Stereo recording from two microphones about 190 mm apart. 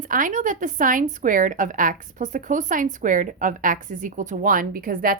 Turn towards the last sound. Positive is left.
turn(degrees=-50)  # may be behind; listen again after turning